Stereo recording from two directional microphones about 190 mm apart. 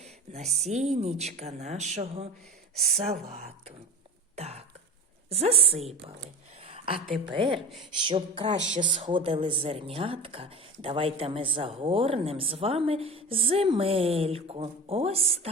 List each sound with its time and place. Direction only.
0.0 s a sound: 35° right (ahead or behind)
0.6 s speech: 35° right (ahead or behind)
2.7 s speech: centre (ahead or behind)
3.0 s speech: 35° right (ahead or behind)
4.4 s throat clearing: 35° right (ahead or behind)
5.3 s a woman's voice: 30° right (ahead or behind)